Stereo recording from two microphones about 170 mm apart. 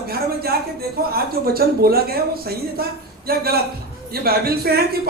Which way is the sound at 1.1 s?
60° right (ahead or behind).